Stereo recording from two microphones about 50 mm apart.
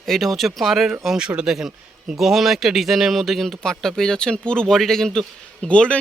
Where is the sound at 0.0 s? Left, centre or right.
Centre.